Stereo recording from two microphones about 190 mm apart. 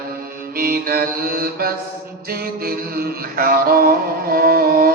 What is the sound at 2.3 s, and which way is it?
Mantra, 50° right (ahead or behind).